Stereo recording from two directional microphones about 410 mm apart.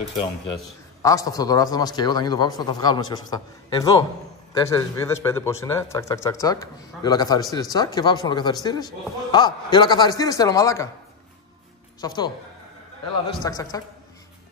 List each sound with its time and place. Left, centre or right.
1.0 s speech: centre
12.0 s speech: centre
13.3 s speech: centre